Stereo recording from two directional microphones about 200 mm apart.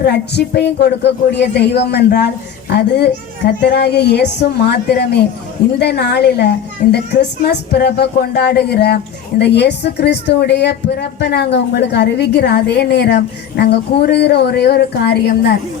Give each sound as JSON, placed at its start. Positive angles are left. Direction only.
{"t": 0.0, "sound": "speech", "side_deg": 55}